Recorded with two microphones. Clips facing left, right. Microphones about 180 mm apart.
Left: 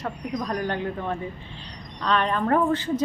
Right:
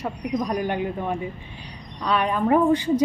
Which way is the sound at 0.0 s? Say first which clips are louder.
Right 3 dB; 10° right (ahead or behind).